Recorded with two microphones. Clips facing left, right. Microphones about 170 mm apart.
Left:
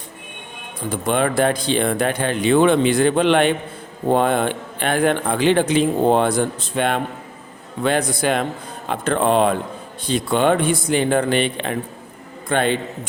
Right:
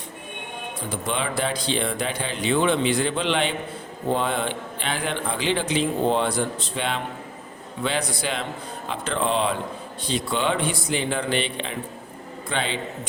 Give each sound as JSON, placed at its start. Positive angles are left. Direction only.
{"t": 1.0, "sound": "speech", "side_deg": 55}